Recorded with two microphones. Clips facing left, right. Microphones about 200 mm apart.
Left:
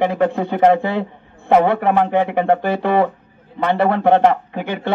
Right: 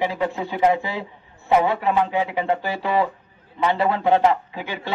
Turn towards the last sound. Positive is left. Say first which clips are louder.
# left 7 dB
turn(degrees=60)  # may be behind; listen again after turning